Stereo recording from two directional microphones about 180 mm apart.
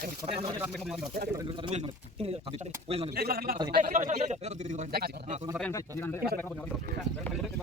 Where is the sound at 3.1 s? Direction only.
60° right (ahead or behind); by 4.8 s 40° right (ahead or behind).